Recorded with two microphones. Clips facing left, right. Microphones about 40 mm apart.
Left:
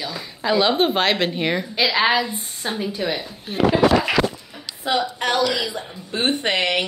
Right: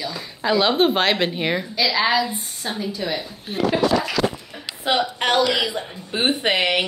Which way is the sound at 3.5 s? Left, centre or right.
Centre.